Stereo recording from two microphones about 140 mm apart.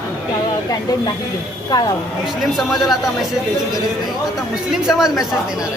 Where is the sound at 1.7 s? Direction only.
25° left (ahead or behind).